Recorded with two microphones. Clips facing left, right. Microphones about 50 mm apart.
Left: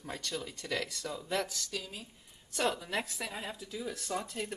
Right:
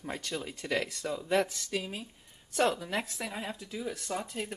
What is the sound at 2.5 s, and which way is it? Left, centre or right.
Speech, centre.